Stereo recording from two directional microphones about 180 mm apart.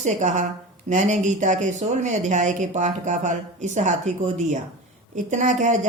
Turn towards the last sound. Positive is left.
turn(degrees=-40)  # may be behind; listen again after turning